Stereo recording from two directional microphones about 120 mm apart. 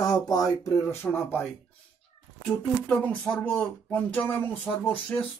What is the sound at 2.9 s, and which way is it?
Speech, 15° left (ahead or behind).